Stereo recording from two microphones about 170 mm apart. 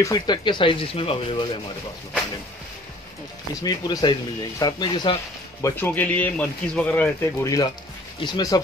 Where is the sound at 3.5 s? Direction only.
20° left (ahead or behind).